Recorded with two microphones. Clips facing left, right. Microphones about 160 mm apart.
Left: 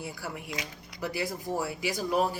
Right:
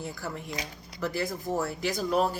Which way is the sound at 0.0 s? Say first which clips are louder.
Right 2 dB; 10° left (ahead or behind).